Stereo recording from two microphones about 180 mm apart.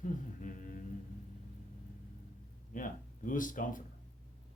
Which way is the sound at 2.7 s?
50° left (ahead or behind).